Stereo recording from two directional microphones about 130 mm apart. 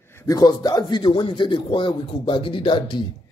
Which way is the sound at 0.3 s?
30° left (ahead or behind).